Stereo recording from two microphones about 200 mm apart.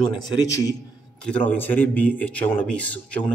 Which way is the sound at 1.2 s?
5° left (ahead or behind).